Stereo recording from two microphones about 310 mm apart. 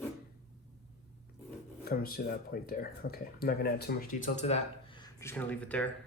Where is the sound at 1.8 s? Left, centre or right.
Left.